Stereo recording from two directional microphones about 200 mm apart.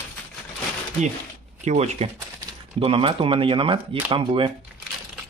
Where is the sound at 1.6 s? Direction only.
35° right (ahead or behind).